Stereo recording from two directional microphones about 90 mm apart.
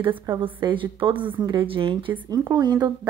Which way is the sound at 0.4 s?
65° right (ahead or behind).